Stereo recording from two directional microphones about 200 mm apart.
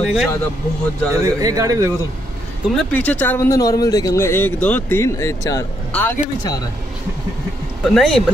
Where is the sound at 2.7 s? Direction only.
5° left (ahead or behind).